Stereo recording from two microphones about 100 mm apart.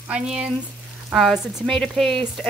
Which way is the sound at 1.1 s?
Centre (ahead or behind).